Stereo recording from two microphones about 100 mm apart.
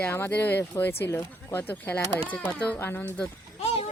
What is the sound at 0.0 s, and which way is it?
Speech, 20° left (ahead or behind).